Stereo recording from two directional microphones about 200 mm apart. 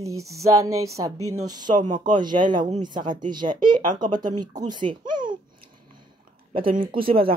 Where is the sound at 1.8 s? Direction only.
40° right (ahead or behind).